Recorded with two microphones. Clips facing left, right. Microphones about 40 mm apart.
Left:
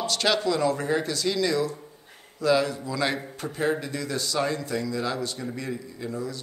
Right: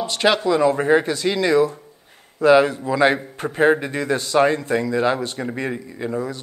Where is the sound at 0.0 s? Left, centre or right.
Right.